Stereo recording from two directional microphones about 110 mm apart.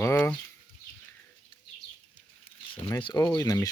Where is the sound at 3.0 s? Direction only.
35° left (ahead or behind).